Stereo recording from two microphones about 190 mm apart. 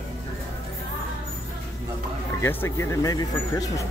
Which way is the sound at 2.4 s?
15° left (ahead or behind).